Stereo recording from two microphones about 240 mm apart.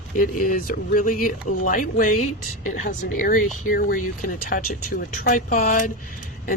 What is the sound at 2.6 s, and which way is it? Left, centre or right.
Speech, left.